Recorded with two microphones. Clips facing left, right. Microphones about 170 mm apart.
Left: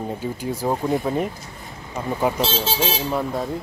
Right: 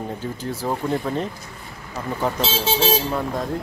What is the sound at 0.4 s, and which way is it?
Speech, 10° left (ahead or behind).